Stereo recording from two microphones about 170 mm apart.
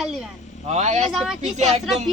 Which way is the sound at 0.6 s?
45° right (ahead or behind).